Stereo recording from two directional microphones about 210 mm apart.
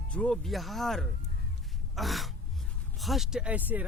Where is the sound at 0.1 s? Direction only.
5° left (ahead or behind).